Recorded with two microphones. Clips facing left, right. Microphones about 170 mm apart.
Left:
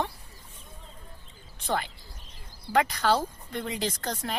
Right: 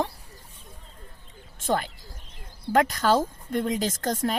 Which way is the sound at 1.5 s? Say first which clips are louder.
Right 4 dB; 45° right (ahead or behind).